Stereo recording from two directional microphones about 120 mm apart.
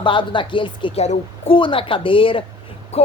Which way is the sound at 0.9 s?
70° left (ahead or behind).